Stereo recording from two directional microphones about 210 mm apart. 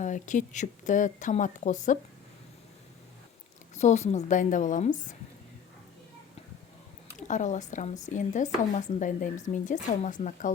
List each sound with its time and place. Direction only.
0.0 s speech: 35° left (ahead or behind)
3.8 s speech: 30° left (ahead or behind)
7.2 s speech: 35° left (ahead or behind)